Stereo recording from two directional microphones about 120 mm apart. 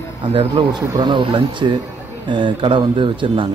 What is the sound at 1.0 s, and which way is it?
Speech, 40° right (ahead or behind).